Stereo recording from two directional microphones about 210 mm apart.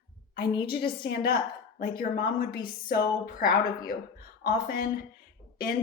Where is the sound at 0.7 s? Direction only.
45° left (ahead or behind).